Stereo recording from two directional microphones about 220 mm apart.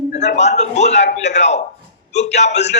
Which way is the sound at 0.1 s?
30° left (ahead or behind).